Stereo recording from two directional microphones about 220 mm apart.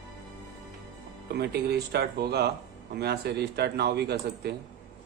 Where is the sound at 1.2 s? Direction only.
45° right (ahead or behind).